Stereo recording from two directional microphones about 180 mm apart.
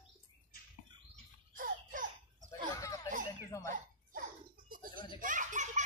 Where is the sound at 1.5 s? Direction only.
50° right (ahead or behind).